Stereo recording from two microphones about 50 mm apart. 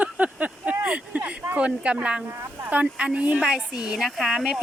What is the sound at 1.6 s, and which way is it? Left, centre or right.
Speech, right.